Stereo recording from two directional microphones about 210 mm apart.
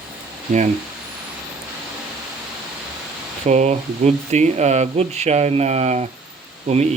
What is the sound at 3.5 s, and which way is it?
Speech, 35° right (ahead or behind).